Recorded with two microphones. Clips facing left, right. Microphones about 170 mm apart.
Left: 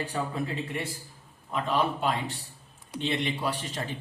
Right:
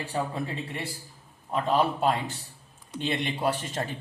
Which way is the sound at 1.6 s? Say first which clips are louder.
Right 3 dB; 40° right (ahead or behind).